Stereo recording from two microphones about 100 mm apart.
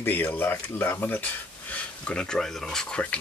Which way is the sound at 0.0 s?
20° left (ahead or behind).